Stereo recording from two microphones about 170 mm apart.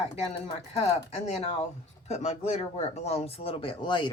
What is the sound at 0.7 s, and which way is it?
Speech, 40° left (ahead or behind).